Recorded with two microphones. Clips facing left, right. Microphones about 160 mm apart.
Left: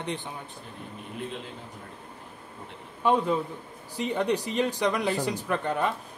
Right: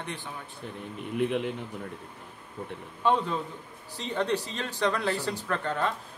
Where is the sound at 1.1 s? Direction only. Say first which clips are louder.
Right 10 dB; 65° right (ahead or behind).